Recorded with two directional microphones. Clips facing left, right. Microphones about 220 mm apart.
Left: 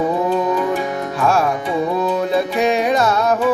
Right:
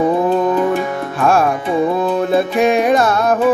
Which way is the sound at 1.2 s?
50° right (ahead or behind).